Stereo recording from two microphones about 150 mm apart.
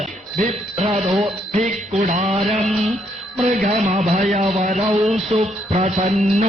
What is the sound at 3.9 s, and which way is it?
Music, 50° right (ahead or behind).